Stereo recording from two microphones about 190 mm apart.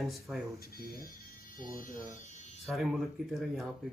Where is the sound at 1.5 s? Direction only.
45° left (ahead or behind).